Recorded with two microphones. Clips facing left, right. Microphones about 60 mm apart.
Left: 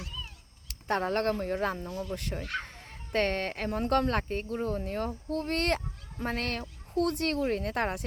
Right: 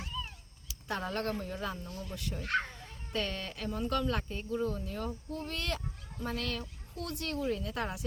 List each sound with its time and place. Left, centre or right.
0.7 s speech: left